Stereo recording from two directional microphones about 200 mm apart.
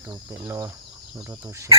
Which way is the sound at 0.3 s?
15° right (ahead or behind).